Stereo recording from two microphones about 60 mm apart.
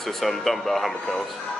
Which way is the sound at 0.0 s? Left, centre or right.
Centre.